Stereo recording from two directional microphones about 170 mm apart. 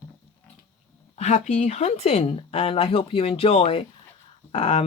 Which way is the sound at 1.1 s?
45° left (ahead or behind).